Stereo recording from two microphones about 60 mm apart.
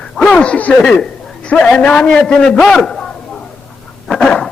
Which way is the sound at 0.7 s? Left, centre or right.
Centre.